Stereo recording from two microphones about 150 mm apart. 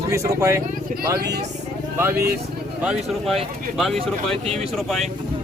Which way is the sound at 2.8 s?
5° right (ahead or behind).